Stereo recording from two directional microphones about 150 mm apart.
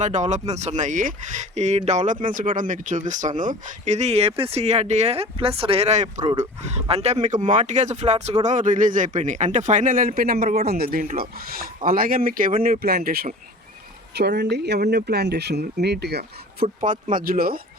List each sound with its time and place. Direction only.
0.0 s speech: 55° right (ahead or behind)
8.4 s a man's voice: 55° right (ahead or behind)
10.2 s speech: 80° right
12.6 s speech: 85° right
16.6 s speech: 65° right (ahead or behind)